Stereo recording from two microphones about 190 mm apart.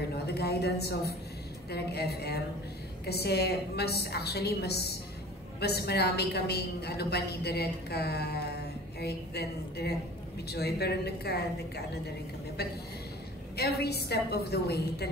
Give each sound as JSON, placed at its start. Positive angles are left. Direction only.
{"t": 0.1, "sound": "a woman's voice", "side_deg": 60}
{"t": 13.6, "sound": "a woman's voice", "side_deg": 55}